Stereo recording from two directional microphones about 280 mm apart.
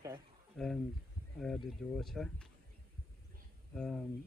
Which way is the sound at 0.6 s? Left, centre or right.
Centre.